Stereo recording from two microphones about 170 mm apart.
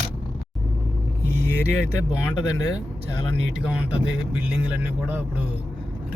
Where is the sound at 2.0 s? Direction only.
20° left (ahead or behind).